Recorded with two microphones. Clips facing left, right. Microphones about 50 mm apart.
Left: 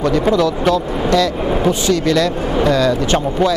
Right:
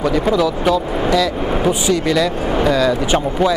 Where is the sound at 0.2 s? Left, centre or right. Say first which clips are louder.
Left 1 dB; centre.